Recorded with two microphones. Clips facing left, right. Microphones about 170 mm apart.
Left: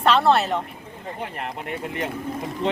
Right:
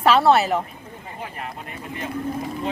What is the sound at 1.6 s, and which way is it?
Speech, 70° left (ahead or behind).